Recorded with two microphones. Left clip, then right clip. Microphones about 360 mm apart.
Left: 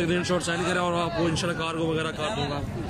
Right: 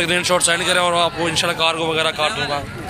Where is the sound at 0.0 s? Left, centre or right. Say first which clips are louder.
Right 9 dB; centre.